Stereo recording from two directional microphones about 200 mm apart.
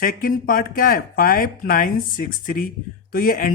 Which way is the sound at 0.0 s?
45° left (ahead or behind).